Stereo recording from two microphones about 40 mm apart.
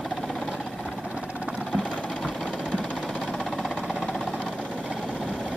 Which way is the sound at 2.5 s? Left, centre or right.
Left.